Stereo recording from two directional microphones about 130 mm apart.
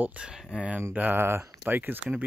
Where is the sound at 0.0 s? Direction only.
10° right (ahead or behind).